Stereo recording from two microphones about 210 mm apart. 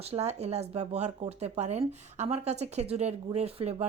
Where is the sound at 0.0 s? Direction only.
30° right (ahead or behind).